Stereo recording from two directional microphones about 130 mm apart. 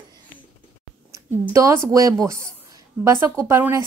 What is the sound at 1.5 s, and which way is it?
Speech, 20° right (ahead or behind).